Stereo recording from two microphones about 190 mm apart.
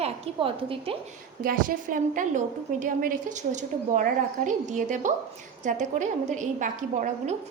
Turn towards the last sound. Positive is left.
turn(degrees=-40)  # may be behind; listen again after turning